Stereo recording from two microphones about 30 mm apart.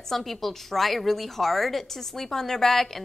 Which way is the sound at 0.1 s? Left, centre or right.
Centre.